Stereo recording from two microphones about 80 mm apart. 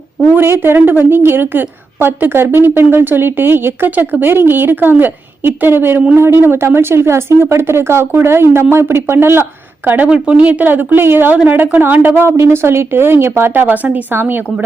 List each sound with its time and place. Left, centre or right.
0.3 s a woman's voice: right